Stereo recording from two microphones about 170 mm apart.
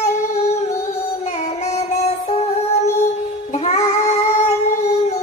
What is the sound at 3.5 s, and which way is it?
Child singing, 40° left (ahead or behind).